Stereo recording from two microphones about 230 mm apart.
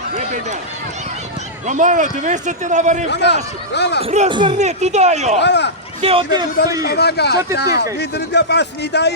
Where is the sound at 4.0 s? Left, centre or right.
Right.